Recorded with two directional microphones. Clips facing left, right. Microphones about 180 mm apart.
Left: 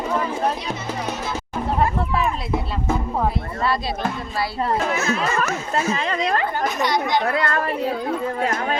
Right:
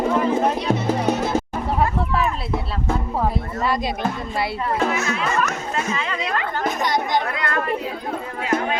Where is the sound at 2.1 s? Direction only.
10° left (ahead or behind).